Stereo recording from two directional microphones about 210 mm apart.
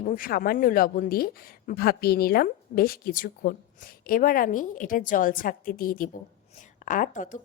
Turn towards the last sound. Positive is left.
turn(degrees=40)  # may be behind; listen again after turning